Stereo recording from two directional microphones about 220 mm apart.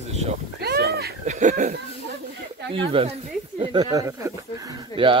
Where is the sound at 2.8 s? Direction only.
25° right (ahead or behind).